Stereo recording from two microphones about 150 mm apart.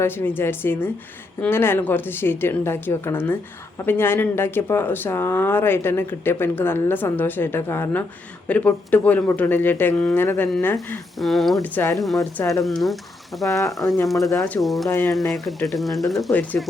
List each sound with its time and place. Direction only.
0.0 s speech: 15° left (ahead or behind)
11.2 s speech: centre (ahead or behind)
11.7 s speech: 15° left (ahead or behind)
11.9 s speech: centre (ahead or behind)
12.4 s speech: 20° left (ahead or behind)
12.6 s speech: centre (ahead or behind)
13.5 s speech: 20° left (ahead or behind)
14.1 s speech: centre (ahead or behind)
14.8 s speech: 20° left (ahead or behind)
15.3 s speech: centre (ahead or behind)